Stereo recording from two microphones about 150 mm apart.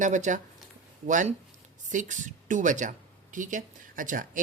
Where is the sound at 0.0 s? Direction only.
55° right (ahead or behind).